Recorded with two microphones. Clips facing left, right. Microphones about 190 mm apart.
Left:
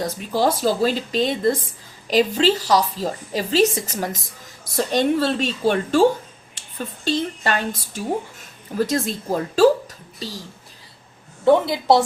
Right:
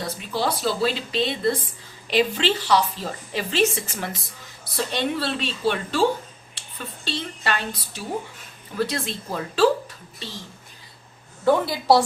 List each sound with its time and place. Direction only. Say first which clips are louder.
0.0 s a woman's voice: left 5 dB; 45° left (ahead or behind)
11.4 s speech: left 3 dB; 25° left (ahead or behind)